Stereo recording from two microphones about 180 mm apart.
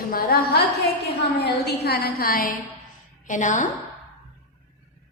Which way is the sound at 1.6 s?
60° left (ahead or behind).